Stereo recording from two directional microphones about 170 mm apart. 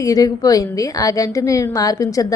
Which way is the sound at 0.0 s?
20° left (ahead or behind).